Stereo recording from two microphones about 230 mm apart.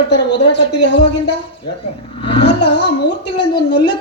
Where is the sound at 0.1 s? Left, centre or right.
Left.